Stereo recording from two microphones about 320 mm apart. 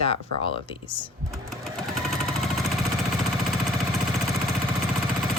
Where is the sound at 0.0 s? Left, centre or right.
Centre.